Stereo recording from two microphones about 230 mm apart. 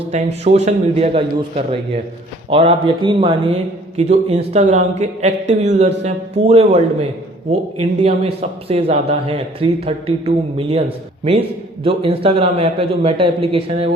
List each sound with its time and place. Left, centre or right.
0.1 s speech: right